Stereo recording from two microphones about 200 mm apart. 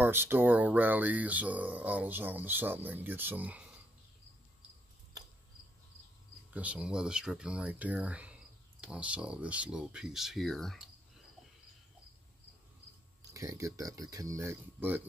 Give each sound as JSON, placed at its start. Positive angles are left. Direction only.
{"t": 0.0, "sound": "speech", "side_deg": -10}
{"t": 6.5, "sound": "speech", "side_deg": -5}
{"t": 13.2, "sound": "speech", "side_deg": -15}